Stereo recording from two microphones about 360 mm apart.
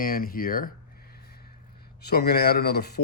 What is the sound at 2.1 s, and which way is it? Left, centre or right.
Speech, left.